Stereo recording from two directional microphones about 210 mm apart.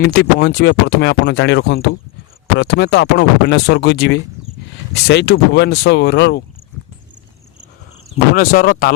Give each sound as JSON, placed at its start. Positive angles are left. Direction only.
{"t": 0.0, "sound": "speech", "side_deg": 50}
{"t": 8.4, "sound": "speech", "side_deg": 40}